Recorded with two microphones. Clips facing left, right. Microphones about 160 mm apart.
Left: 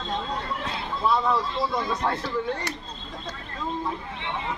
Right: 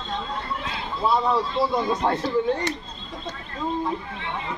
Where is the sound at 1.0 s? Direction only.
15° right (ahead or behind).